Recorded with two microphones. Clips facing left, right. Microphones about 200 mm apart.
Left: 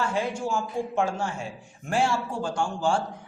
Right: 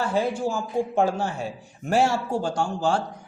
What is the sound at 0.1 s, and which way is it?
Speech, 35° right (ahead or behind).